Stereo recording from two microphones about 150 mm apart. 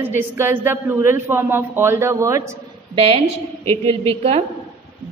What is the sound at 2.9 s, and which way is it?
A woman's voice, 40° right (ahead or behind).